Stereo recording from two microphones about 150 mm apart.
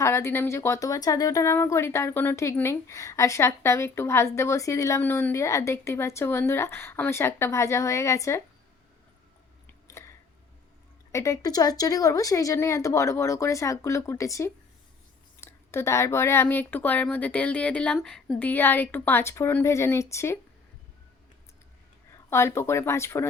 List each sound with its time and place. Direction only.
0.0 s speech: 15° left (ahead or behind)
9.8 s a sound: 20° left (ahead or behind)
11.1 s speech: 20° left (ahead or behind)
22.3 s speech: 20° left (ahead or behind)